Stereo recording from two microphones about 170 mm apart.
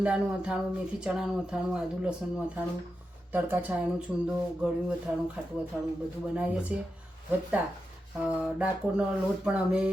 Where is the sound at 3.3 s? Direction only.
10° right (ahead or behind).